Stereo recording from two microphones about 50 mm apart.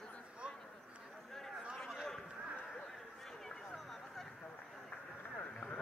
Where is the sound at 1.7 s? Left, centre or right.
Centre.